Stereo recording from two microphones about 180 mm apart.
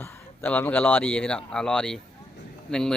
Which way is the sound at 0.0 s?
10° left (ahead or behind).